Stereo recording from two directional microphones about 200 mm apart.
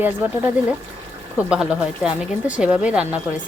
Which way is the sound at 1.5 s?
5° right (ahead or behind).